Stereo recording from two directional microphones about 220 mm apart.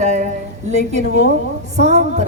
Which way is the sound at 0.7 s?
30° right (ahead or behind).